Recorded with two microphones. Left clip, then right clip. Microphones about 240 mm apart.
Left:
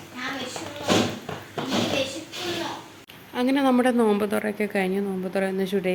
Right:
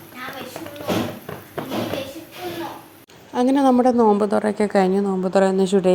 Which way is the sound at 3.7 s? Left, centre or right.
Centre.